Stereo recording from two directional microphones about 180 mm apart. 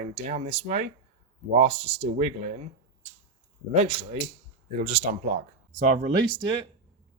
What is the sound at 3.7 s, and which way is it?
Speech, 35° right (ahead or behind).